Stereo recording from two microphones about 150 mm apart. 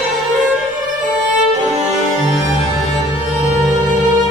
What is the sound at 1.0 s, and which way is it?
Violin, 50° right (ahead or behind).